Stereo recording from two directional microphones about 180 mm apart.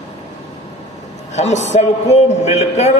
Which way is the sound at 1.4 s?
40° left (ahead or behind).